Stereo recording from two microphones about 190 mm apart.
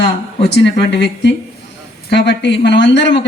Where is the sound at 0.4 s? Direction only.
65° left (ahead or behind).